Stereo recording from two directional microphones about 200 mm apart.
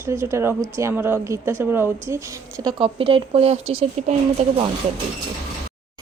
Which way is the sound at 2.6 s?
25° right (ahead or behind).